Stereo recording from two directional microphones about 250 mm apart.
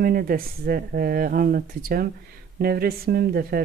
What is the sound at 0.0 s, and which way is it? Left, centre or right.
Speech, right.